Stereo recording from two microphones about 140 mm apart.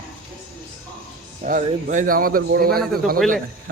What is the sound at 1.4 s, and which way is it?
A man's voice, 70° right (ahead or behind).